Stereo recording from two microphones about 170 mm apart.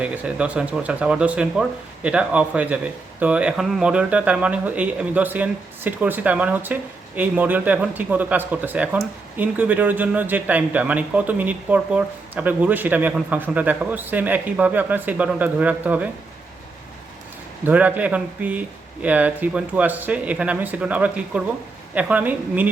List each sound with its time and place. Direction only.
0.0 s speech: 10° right (ahead or behind)
17.7 s speech: 10° right (ahead or behind)